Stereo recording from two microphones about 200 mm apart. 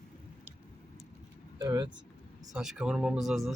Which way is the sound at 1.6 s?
20° right (ahead or behind).